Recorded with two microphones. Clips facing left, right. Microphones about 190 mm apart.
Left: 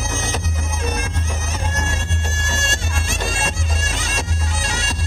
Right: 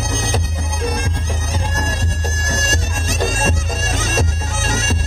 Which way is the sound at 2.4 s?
40° right (ahead or behind).